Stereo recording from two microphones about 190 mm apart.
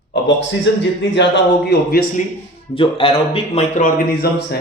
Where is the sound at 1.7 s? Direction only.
50° left (ahead or behind).